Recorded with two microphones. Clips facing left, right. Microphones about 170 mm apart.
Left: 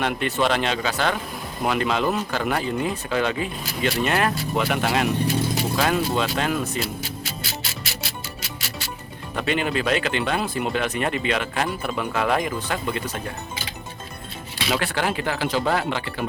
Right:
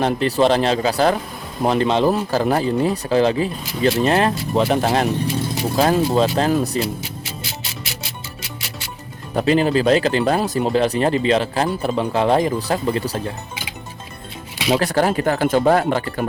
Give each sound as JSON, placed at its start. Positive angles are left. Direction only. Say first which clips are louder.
{"t": 0.0, "sound": "speech", "louder": "right 6 dB", "side_deg": -35}
{"t": 9.3, "sound": "speech", "louder": "right 8 dB", "side_deg": -35}
{"t": 14.7, "sound": "speech", "louder": "right 7 dB", "side_deg": -40}